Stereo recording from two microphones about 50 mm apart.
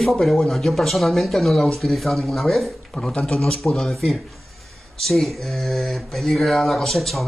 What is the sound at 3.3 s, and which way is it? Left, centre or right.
Speech, centre.